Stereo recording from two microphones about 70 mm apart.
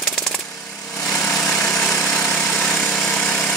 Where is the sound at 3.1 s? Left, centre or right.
Centre.